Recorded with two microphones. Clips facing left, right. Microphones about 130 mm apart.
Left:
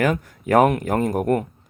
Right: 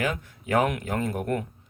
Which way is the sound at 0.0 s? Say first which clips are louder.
Left 8 dB; 50° left (ahead or behind).